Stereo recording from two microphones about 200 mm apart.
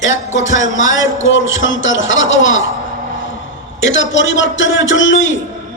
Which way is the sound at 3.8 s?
70° left (ahead or behind).